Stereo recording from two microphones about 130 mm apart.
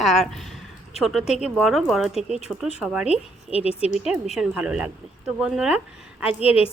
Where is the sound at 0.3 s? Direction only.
Centre (ahead or behind).